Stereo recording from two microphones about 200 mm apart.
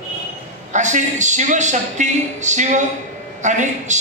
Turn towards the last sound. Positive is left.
turn(degrees=-35)  # may be behind; listen again after turning